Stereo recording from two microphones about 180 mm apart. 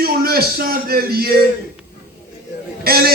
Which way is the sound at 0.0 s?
60° right (ahead or behind).